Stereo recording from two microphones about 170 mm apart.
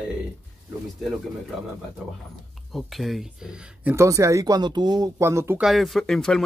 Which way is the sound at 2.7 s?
Centre (ahead or behind).